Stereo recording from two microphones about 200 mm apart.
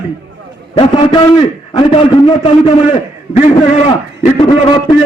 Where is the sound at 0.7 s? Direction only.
25° left (ahead or behind).